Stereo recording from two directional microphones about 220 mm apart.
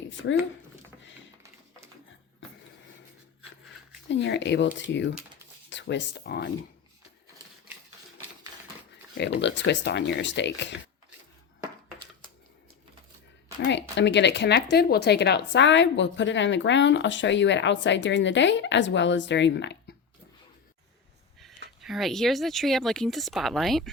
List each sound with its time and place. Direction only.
4.1 s speech: 55° left (ahead or behind)
9.1 s speech: 50° left (ahead or behind)
13.7 s speech: 50° left (ahead or behind)
21.8 s speech: centre (ahead or behind)